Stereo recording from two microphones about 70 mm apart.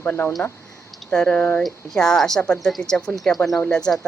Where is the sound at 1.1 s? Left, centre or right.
Centre.